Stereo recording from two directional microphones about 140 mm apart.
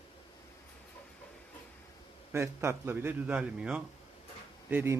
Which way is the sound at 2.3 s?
20° right (ahead or behind).